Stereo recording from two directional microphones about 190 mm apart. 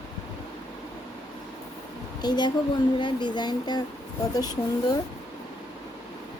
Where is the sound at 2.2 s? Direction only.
20° left (ahead or behind).